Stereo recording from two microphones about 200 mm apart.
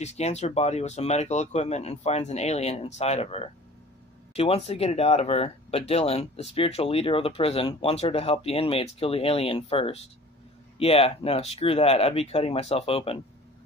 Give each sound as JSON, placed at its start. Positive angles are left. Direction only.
{"t": 0.0, "sound": "speech", "side_deg": 35}